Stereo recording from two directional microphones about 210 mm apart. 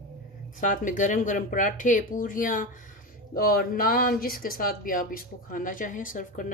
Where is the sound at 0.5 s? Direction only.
40° left (ahead or behind).